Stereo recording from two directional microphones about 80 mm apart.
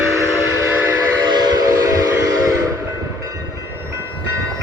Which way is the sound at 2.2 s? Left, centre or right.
Right.